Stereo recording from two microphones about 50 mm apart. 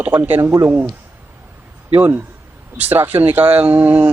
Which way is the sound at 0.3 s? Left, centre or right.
Right.